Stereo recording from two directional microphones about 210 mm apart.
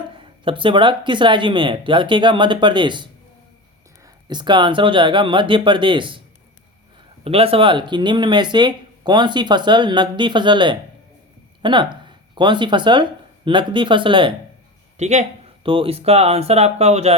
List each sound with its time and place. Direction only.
0.1 s speech: 25° right (ahead or behind)
7.3 s speech: 25° right (ahead or behind)